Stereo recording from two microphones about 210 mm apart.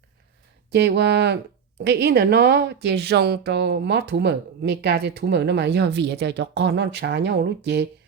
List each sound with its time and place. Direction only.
0.7 s a woman's voice: 50° right (ahead or behind)